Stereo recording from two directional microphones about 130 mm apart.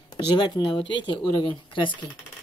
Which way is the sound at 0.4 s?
35° left (ahead or behind).